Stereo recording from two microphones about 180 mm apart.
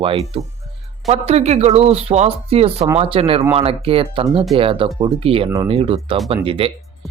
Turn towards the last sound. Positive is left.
turn(degrees=-30)  # may be behind; listen again after turning